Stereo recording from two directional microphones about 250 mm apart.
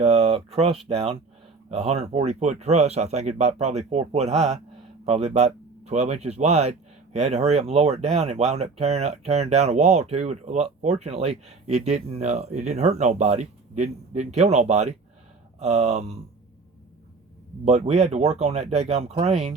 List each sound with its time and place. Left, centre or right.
0.0 s speech: right
17.7 s speech: right